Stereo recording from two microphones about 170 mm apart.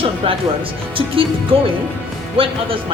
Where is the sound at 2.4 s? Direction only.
30° right (ahead or behind).